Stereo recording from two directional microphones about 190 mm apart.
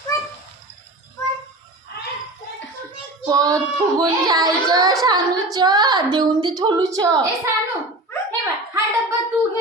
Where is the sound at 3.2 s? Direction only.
20° right (ahead or behind).